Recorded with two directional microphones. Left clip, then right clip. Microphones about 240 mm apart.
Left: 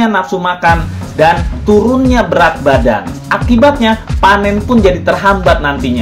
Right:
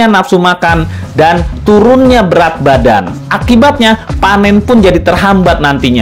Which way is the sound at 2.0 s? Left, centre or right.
Right.